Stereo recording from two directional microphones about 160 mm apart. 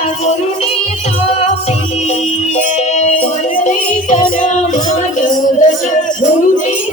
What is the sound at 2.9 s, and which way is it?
Music, 45° left (ahead or behind).